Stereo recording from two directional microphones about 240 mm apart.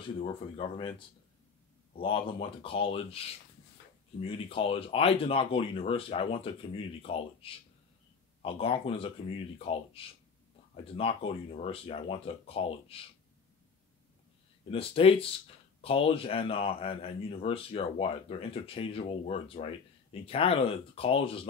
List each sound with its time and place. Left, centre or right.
0.2 s speech: left
14.7 s speech: left